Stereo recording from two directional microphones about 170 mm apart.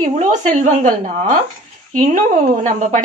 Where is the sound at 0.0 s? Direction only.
45° right (ahead or behind).